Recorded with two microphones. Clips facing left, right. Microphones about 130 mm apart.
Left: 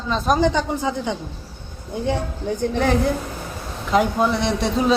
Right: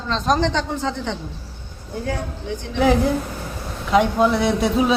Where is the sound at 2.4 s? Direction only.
45° left (ahead or behind).